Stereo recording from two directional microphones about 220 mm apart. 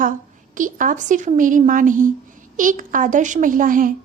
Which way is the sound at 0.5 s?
35° right (ahead or behind).